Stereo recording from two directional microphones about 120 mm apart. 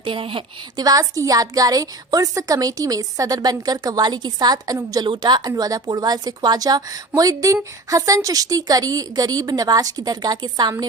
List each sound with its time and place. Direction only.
0.0 s a woman's voice: 45° right (ahead or behind)
0.8 s a woman's voice: 30° right (ahead or behind)